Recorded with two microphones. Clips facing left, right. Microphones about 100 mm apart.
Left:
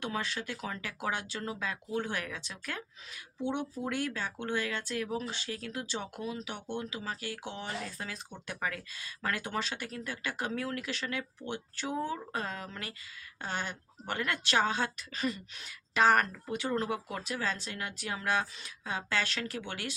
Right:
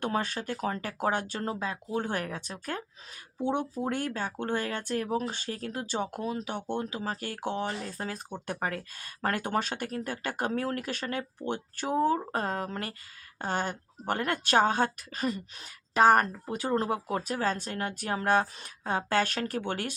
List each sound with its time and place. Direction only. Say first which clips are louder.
0.0 s a woman's voice: right 5 dB; 50° right (ahead or behind)
1.5 s a woman's voice: right 3 dB; 30° right (ahead or behind); by 19.9 s 50° right (ahead or behind)